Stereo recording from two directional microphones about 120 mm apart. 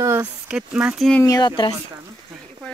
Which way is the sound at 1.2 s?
30° left (ahead or behind).